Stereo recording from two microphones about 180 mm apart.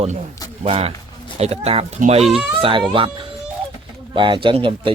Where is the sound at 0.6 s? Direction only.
35° right (ahead or behind).